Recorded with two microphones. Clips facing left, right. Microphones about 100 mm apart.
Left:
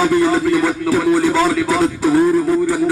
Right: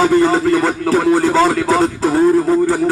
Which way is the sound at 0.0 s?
20° right (ahead or behind).